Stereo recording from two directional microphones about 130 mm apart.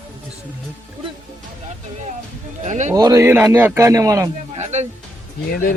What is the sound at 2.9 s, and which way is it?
A man's voice, 25° right (ahead or behind).